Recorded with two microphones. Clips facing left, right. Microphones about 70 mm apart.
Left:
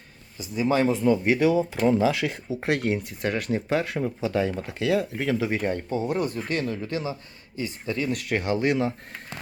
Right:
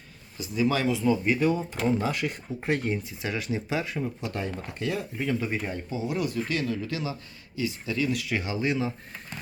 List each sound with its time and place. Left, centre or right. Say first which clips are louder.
0.5 s speech: left 3 dB; left
1.3 s speech: left 4 dB; left
2.6 s speech: left 3 dB; left
4.7 s speech: left 7 dB; left